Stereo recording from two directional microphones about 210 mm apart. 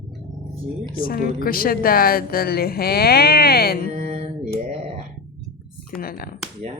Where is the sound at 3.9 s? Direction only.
30° right (ahead or behind).